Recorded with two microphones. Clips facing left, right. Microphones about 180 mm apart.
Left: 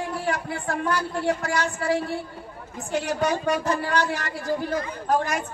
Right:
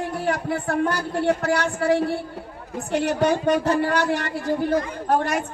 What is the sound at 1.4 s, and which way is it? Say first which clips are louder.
Music: right 4 dB; 60° right (ahead or behind).